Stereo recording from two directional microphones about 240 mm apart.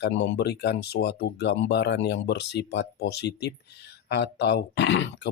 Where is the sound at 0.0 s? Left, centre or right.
Left.